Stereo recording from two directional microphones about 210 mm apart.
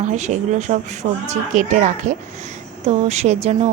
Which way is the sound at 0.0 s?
35° right (ahead or behind).